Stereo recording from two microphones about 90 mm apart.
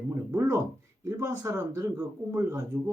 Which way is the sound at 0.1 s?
30° right (ahead or behind).